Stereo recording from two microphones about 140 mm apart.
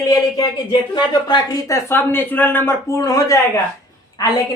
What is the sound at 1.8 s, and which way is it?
Speech, 15° left (ahead or behind).